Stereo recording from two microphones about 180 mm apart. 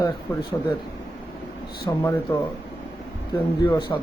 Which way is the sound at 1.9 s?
20° left (ahead or behind).